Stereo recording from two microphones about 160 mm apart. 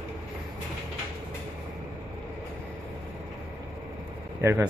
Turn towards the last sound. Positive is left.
turn(degrees=-15)  # may be behind; listen again after turning